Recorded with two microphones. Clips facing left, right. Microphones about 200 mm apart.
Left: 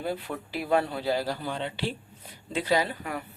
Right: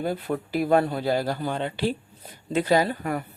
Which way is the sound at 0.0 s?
45° right (ahead or behind).